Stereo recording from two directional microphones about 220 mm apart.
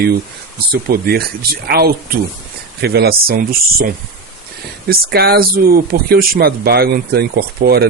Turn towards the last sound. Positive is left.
turn(degrees=-45)  # may be behind; listen again after turning